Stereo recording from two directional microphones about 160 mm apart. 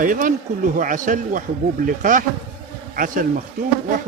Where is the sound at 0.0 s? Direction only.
55° right (ahead or behind).